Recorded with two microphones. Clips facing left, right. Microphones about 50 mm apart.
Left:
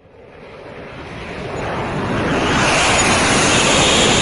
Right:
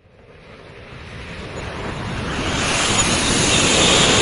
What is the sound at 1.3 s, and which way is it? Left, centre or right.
Waves, left.